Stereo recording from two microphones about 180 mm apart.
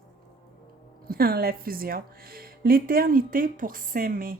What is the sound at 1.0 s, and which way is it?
A woman's voice, 55° right (ahead or behind).